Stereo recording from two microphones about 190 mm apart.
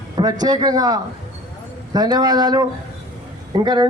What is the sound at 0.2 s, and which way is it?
A man's voice, 20° right (ahead or behind).